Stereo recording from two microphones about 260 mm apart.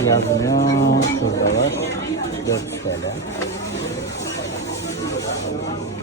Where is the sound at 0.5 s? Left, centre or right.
Left.